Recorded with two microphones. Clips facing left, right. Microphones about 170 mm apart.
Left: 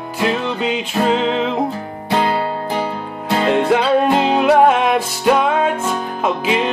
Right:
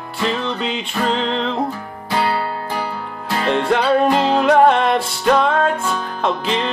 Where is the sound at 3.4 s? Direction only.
5° left (ahead or behind).